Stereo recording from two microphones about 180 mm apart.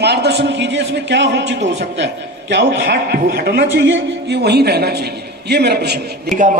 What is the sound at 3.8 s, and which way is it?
A man's voice, 80° right.